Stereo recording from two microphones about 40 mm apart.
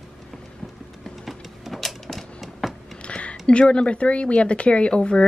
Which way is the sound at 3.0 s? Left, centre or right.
Left.